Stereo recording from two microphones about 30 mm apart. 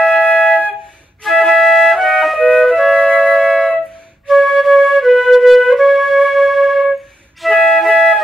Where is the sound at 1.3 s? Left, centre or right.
Centre.